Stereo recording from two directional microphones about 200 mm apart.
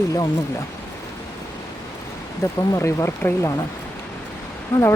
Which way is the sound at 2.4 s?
15° left (ahead or behind).